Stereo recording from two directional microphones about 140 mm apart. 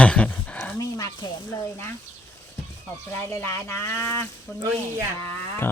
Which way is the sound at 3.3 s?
20° left (ahead or behind).